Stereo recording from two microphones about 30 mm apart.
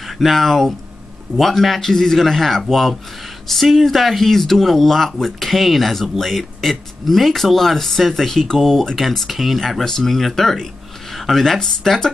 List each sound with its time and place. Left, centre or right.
0.0 s speech: centre
1.8 s speech: centre